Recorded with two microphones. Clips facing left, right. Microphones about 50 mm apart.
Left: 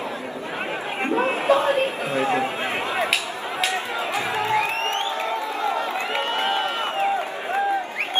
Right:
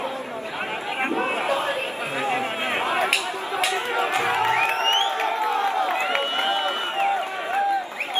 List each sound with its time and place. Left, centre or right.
1.5 s a sound: left
2.1 s chatter: centre
3.7 s music: right
6.3 s run: left